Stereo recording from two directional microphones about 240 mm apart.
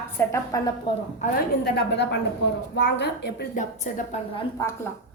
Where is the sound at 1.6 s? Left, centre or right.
Left.